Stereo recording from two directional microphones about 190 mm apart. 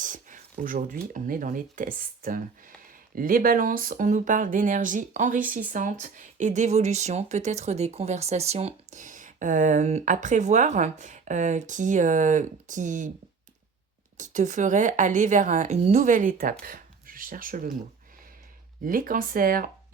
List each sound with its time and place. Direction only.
0.0 s a sound: 45° right (ahead or behind)
1.1 s speech: 45° right (ahead or behind)
14.2 s speech: 40° right (ahead or behind)
18.9 s speech: 45° right (ahead or behind)